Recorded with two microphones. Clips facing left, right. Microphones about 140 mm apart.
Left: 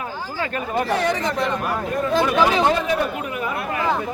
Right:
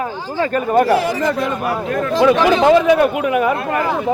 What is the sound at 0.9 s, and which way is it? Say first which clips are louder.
Speech: right 6 dB; 5° right (ahead or behind).